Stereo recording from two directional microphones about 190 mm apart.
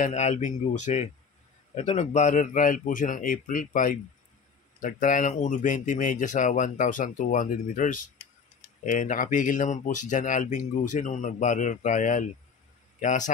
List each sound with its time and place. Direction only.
0.0 s speech: 35° left (ahead or behind)